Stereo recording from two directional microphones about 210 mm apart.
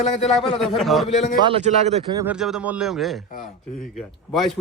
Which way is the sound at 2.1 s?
5° right (ahead or behind).